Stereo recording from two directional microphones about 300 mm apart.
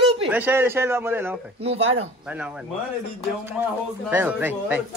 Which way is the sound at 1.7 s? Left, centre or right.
Centre.